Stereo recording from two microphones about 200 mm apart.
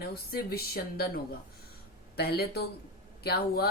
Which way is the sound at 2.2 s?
50° left (ahead or behind).